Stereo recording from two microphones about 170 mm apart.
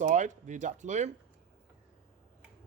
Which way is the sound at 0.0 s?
45° right (ahead or behind).